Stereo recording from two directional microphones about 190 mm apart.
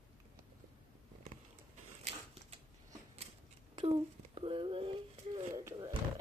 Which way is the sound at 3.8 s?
30° right (ahead or behind).